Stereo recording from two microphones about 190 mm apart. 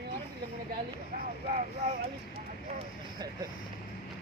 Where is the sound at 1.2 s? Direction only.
45° right (ahead or behind).